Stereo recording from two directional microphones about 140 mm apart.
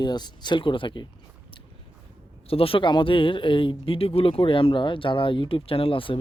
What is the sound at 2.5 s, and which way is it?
Speech, 40° left (ahead or behind).